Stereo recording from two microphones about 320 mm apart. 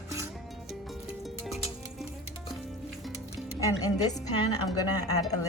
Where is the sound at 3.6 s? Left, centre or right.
Centre.